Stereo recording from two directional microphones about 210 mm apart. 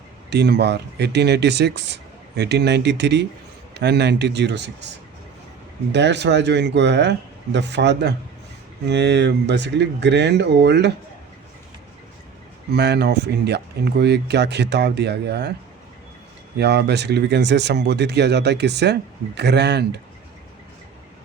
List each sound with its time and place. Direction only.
0.3 s speech: 55° right (ahead or behind)
5.9 s speech: 55° right (ahead or behind)
12.7 s speech: 50° right (ahead or behind)
16.6 s speech: 55° right (ahead or behind)